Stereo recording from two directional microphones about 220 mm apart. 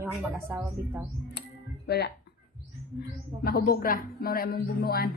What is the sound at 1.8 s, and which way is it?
Speech, 50° left (ahead or behind).